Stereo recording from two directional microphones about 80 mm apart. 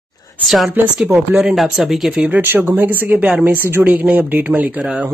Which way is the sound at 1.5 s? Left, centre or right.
Centre.